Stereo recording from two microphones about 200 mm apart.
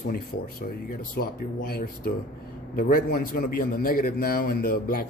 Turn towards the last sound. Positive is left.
turn(degrees=45)  # may be behind; listen again after turning